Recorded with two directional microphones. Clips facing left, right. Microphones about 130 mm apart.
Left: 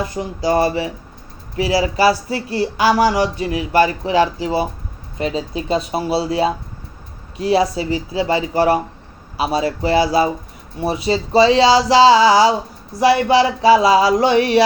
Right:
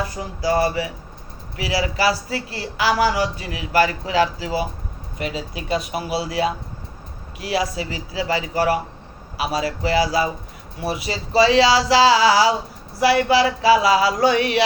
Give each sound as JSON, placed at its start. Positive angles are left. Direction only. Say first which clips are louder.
{"t": 0.0, "sound": "speech", "louder": "left 3 dB", "side_deg": 25}